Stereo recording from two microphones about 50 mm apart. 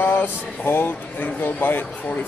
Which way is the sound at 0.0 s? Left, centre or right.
Left.